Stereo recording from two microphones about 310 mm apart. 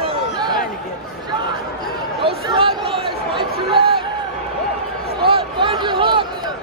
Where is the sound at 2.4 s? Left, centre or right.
Centre.